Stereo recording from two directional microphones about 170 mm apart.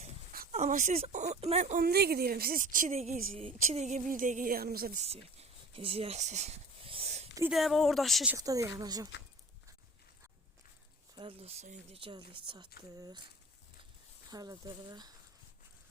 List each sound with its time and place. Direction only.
0.5 s speech: 45° right (ahead or behind)
1.8 s a woman's voice: 65° right (ahead or behind)
3.1 s a woman's voice: 35° right (ahead or behind); by 4.9 s 65° right (ahead or behind)
5.0 s a sound: 35° right (ahead or behind)
7.5 s speech: centre (ahead or behind)
8.4 s speech: 20° right (ahead or behind)
11.1 s speech: 30° right (ahead or behind)
14.3 s speech: 20° right (ahead or behind)